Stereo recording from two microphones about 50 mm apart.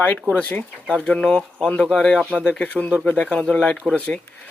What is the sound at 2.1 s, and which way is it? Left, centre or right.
Speech, left.